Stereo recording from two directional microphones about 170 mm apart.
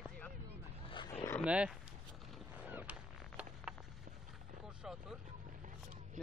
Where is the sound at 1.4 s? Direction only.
5° right (ahead or behind).